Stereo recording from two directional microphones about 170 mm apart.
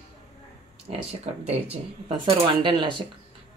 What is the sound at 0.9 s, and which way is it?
Speech, 35° right (ahead or behind).